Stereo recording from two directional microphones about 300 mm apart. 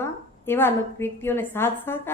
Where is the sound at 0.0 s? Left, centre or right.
Centre.